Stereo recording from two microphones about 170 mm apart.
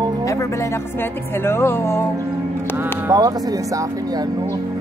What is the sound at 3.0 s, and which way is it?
A woman's voice, 20° right (ahead or behind).